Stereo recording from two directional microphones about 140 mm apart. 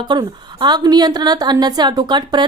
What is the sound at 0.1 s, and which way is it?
A woman's voice, 30° right (ahead or behind).